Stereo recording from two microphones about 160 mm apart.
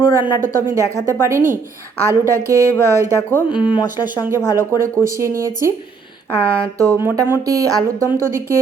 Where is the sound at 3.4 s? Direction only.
30° left (ahead or behind).